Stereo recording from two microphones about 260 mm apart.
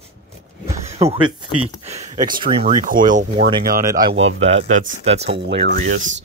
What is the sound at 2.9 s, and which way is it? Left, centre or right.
Speech, right.